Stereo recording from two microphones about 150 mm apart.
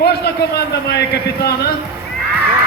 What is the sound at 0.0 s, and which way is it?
A man's voice, 90° left.